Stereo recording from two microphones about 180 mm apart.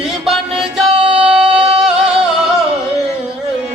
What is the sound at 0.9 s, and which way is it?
Singing, 30° right (ahead or behind).